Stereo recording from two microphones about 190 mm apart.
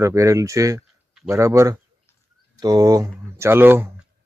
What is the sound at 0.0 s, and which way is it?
Speech, 15° right (ahead or behind).